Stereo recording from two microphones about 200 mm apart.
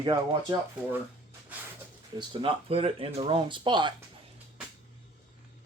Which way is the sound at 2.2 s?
25° right (ahead or behind).